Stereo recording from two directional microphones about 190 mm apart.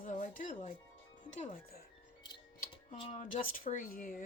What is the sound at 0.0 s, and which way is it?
Music, 45° left (ahead or behind).